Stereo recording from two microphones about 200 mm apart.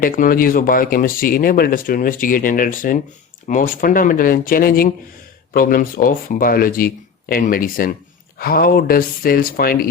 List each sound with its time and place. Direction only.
0.0 s speech: 45° left (ahead or behind)